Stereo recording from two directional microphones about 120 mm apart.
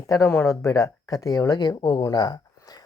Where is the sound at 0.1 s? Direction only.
20° left (ahead or behind).